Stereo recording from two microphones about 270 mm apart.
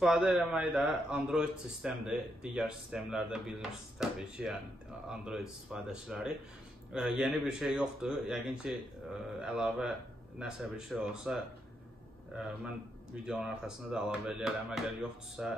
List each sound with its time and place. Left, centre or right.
0.0 s a man's voice: centre